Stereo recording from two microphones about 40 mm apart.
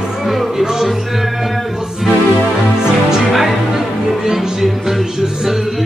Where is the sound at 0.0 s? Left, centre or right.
Centre.